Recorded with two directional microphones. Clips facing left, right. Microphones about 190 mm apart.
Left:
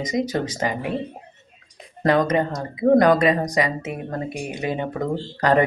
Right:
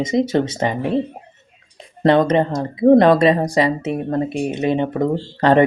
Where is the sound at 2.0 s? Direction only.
30° right (ahead or behind).